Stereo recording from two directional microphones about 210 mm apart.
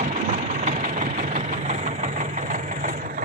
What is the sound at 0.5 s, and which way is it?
Vehicle, 35° right (ahead or behind).